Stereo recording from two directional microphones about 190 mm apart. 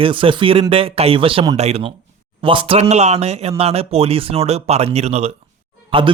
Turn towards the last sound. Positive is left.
turn(degrees=-30)  # may be behind; listen again after turning